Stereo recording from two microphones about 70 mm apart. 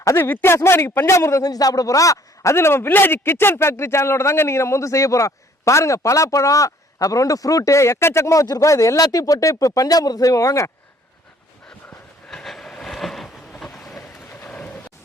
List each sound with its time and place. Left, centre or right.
0.2 s a man's voice: left
1.4 s a man's voice: left
12.3 s vehicle: centre
14.4 s a sound: centre